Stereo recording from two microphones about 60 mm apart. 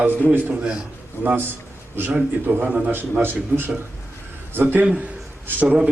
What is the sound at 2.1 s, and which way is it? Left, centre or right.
A man's voice, right.